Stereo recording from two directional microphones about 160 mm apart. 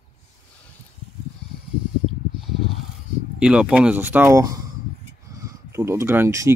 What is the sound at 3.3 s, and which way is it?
Speech, 5° right (ahead or behind).